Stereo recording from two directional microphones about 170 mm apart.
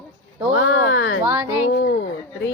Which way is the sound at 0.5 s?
90° left.